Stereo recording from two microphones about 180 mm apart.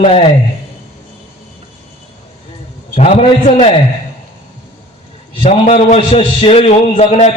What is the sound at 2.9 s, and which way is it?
Speech, 35° left (ahead or behind).